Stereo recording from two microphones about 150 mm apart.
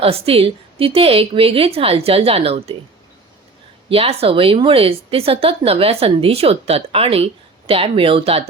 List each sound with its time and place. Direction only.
0.0 s speech: 40° right (ahead or behind)
3.8 s speech: 40° right (ahead or behind)